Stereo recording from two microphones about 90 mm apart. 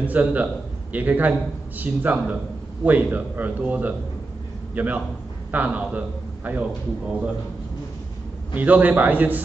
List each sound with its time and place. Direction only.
0.0 s a man's voice: 15° right (ahead or behind)
8.5 s speech: 20° right (ahead or behind)